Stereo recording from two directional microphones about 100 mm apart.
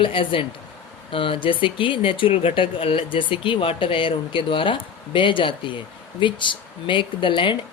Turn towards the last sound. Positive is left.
turn(degrees=55)  # may be behind; listen again after turning